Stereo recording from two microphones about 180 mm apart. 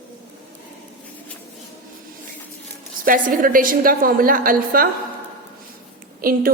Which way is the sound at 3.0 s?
50° right (ahead or behind).